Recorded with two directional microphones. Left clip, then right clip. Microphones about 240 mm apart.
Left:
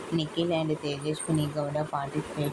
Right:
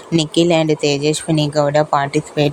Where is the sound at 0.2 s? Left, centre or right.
Right.